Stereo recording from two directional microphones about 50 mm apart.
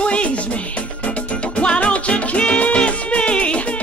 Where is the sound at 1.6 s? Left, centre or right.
Left.